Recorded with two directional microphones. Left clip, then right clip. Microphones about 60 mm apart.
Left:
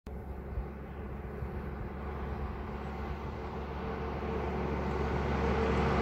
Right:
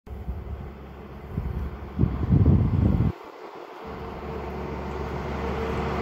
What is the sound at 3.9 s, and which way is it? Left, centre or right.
Vehicle, right.